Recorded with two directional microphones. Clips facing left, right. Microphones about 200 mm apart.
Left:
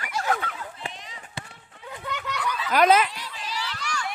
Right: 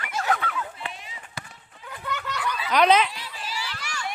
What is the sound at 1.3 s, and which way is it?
Run, 30° left (ahead or behind).